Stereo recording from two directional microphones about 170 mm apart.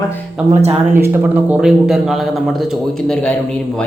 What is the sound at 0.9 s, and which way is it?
A man's voice, 10° right (ahead or behind).